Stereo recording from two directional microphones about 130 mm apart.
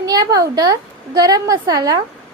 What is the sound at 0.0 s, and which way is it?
A woman's voice, 30° right (ahead or behind).